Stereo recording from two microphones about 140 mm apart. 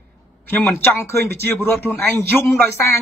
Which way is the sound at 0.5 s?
15° left (ahead or behind).